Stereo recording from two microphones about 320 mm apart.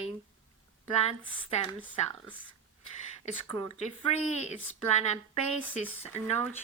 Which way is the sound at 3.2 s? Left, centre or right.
Centre.